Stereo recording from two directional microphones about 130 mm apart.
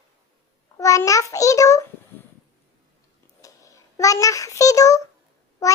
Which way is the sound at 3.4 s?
25° left (ahead or behind).